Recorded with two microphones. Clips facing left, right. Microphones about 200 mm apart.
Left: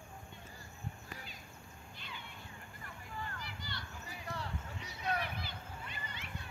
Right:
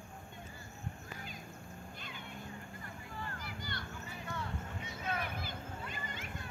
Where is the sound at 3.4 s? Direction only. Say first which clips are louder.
Right 3 dB; 50° right (ahead or behind).